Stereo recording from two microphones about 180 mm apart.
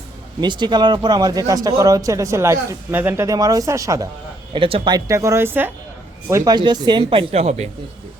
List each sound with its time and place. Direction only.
0.4 s speech: 25° right (ahead or behind)
4.5 s speech: 30° right (ahead or behind)